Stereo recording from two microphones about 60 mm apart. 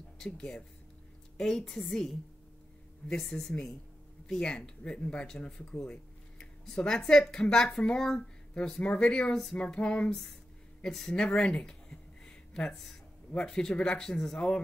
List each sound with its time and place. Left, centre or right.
0.2 s speech: centre
11.2 s a sound: centre
13.3 s speech: centre